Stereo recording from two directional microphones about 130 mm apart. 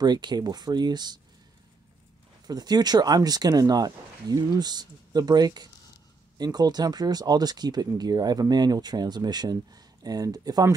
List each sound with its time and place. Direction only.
0.0 s speech: 35° right (ahead or behind)
2.4 s speech: 30° right (ahead or behind)